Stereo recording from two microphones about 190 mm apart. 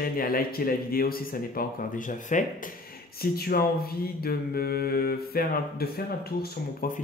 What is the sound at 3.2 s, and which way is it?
Speech, 55° left (ahead or behind).